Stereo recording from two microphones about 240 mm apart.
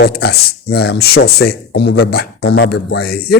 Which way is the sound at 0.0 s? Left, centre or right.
Left.